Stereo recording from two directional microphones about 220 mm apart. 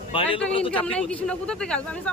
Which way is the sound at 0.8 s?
5° left (ahead or behind).